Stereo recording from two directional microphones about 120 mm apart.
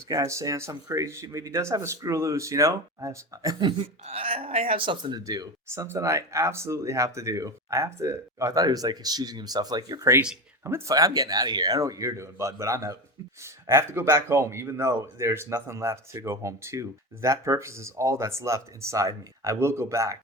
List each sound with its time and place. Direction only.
0.1 s a man's voice: 25° right (ahead or behind)
3.7 s speech: 50° right (ahead or behind)
5.2 s a man's voice: 30° right (ahead or behind)
10.6 s a man's voice: 20° right (ahead or behind)